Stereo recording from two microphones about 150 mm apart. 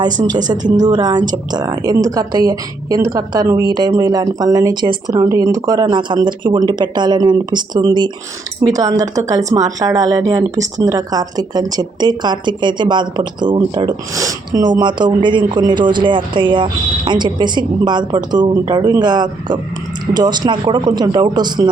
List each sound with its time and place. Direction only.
0.0 s speech: 30° right (ahead or behind)